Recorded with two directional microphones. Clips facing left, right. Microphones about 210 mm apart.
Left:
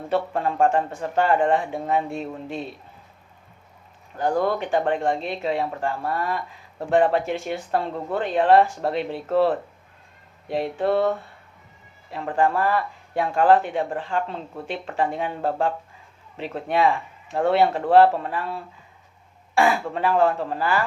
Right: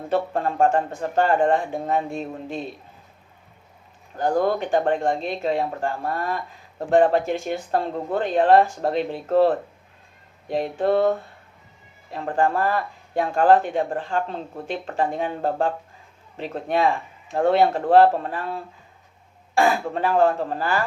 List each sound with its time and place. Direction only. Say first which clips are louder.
0.1 s speech: right 1 dB; 40° right (ahead or behind)
4.2 s speech: right 1 dB; 45° right (ahead or behind)
12.1 s speech: even; 40° right (ahead or behind)